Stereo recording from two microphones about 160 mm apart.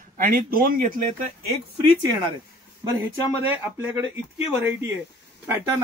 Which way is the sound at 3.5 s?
10° right (ahead or behind).